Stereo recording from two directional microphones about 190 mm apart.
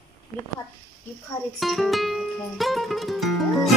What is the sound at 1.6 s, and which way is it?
Music, centre (ahead or behind).